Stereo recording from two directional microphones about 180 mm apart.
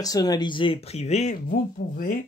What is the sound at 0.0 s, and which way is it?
Speech, 20° left (ahead or behind).